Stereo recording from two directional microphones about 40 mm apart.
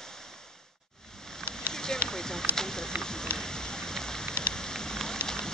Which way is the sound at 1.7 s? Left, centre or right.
Centre.